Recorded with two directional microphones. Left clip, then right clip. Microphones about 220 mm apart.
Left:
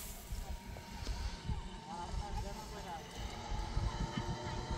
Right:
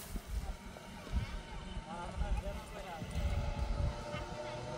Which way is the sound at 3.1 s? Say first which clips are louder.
Right 2 dB; 40° right (ahead or behind).